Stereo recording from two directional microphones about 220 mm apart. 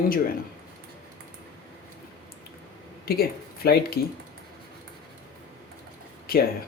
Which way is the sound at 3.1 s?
45° left (ahead or behind).